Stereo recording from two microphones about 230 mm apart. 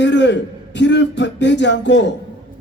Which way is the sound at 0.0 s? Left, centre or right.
Left.